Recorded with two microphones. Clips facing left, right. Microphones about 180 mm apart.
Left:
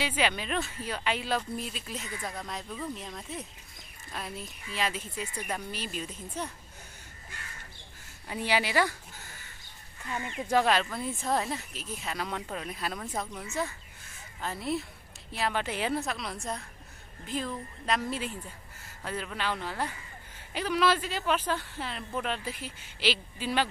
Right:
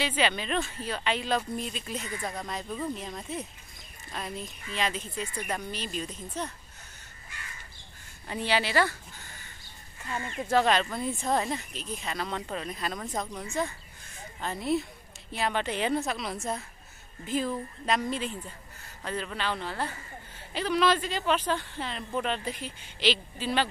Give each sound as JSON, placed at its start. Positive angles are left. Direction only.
{"t": 0.0, "sound": "speech", "side_deg": 10}
{"t": 8.3, "sound": "speech", "side_deg": 10}
{"t": 10.1, "sound": "speech", "side_deg": 15}
{"t": 10.5, "sound": "speech", "side_deg": 5}
{"t": 19.0, "sound": "speech", "side_deg": 10}